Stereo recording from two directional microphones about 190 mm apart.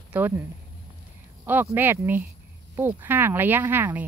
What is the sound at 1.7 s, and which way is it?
Speech, 10° right (ahead or behind).